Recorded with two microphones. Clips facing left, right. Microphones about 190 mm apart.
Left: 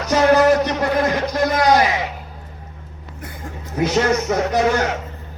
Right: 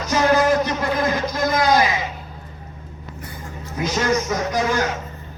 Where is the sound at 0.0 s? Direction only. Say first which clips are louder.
Left 4 dB; 65° left (ahead or behind).